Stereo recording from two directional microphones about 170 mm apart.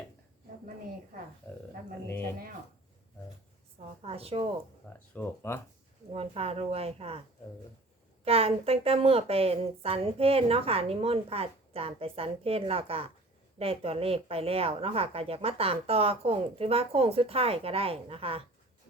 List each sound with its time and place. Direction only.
4.0 s a sound: 35° right (ahead or behind)
5.1 s speech: 15° left (ahead or behind)
6.1 s a woman's voice: 35° right (ahead or behind)
8.2 s a woman's voice: 35° right (ahead or behind)